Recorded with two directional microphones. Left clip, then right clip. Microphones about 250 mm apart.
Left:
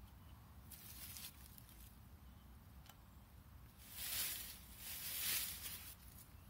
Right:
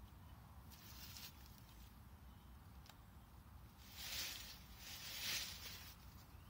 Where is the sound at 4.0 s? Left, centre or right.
Centre.